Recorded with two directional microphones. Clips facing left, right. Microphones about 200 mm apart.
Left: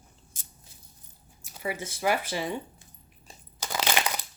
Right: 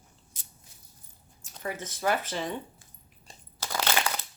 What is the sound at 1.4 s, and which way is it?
Speech, 10° left (ahead or behind).